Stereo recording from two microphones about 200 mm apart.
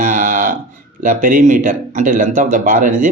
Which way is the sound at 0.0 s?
40° right (ahead or behind).